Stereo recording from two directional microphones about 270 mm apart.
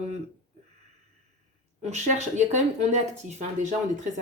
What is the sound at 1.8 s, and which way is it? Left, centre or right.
Speech, right.